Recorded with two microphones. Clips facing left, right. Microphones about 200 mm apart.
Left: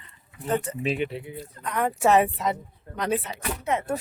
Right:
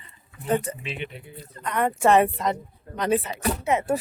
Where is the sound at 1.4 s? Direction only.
Centre (ahead or behind).